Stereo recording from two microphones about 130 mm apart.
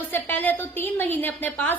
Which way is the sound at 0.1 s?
15° left (ahead or behind).